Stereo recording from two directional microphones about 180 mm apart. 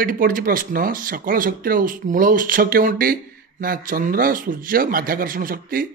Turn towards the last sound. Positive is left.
turn(degrees=-50)  # may be behind; listen again after turning